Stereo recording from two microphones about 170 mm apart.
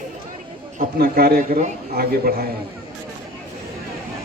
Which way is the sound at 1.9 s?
65° right (ahead or behind).